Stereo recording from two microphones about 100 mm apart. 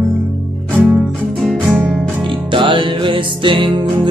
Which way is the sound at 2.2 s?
55° right (ahead or behind).